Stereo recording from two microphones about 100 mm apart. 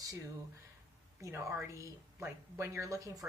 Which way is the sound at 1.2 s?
25° right (ahead or behind).